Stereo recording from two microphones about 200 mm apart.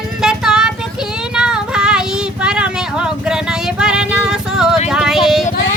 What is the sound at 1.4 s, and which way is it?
Child singing, 5° right (ahead or behind).